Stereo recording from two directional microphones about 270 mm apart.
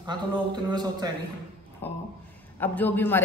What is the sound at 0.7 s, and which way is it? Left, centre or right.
Speech, centre.